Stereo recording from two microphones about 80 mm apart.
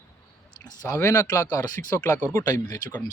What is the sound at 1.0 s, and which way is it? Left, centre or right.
Speech, left.